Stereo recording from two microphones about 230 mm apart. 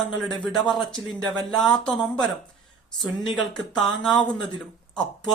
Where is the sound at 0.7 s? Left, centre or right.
Centre.